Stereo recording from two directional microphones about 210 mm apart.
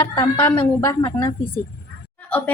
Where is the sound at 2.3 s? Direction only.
10° left (ahead or behind).